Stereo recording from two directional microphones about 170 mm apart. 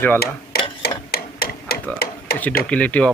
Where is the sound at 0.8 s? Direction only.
65° left (ahead or behind).